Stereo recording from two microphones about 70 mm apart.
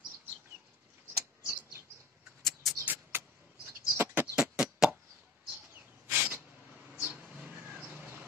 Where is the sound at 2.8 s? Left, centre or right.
Right.